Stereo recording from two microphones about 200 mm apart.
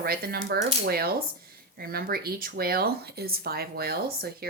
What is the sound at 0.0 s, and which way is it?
Speech, 50° right (ahead or behind).